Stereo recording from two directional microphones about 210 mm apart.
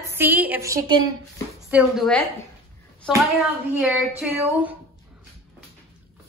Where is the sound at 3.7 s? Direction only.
5° right (ahead or behind).